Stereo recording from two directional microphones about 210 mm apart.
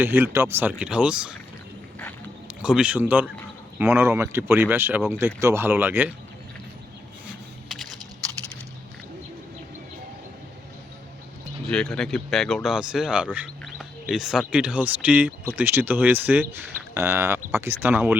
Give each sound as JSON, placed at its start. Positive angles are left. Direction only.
{"t": 0.0, "sound": "speech", "side_deg": -10}
{"t": 2.6, "sound": "speech", "side_deg": -5}
{"t": 11.7, "sound": "speech", "side_deg": 5}